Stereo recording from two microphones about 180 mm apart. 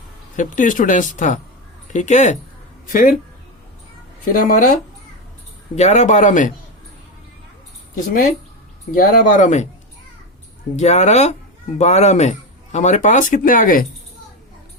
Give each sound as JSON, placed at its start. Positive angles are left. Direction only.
{"t": 0.3, "sound": "speech", "side_deg": 45}
{"t": 4.3, "sound": "speech", "side_deg": 50}
{"t": 7.9, "sound": "speech", "side_deg": 50}
{"t": 10.8, "sound": "speech", "side_deg": 40}